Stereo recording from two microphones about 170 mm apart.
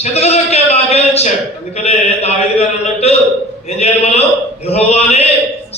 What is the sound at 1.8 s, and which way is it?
A man's voice, 40° left (ahead or behind).